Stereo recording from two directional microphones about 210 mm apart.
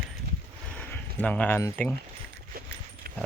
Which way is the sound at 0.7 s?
5° left (ahead or behind).